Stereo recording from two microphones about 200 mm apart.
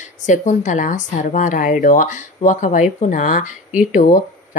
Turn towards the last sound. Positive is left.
turn(degrees=40)  # may be behind; listen again after turning